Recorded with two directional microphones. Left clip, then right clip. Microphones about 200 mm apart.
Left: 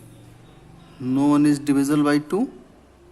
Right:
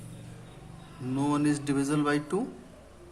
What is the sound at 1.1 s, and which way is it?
Speech, 40° left (ahead or behind).